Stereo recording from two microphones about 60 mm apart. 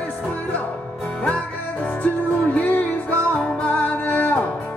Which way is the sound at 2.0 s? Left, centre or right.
Left.